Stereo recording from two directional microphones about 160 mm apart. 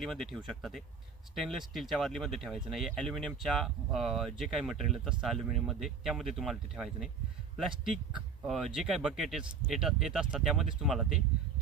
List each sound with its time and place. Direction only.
0.0 s speech: centre (ahead or behind)